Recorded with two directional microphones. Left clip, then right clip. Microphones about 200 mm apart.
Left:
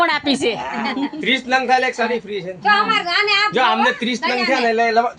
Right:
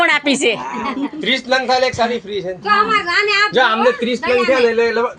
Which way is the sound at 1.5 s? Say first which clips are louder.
Right 1 dB; 30° left (ahead or behind).